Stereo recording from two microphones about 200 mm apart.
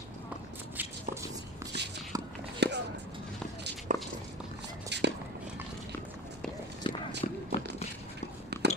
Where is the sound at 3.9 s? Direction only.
40° right (ahead or behind).